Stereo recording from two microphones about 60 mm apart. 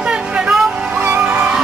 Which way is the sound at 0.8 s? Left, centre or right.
Right.